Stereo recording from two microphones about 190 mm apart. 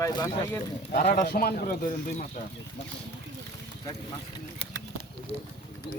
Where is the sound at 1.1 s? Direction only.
55° left (ahead or behind).